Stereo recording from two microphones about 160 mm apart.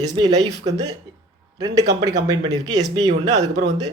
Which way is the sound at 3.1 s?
90° right.